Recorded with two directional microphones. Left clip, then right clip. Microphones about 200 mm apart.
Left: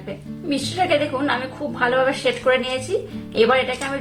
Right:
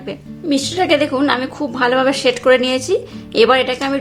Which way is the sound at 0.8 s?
45° right (ahead or behind).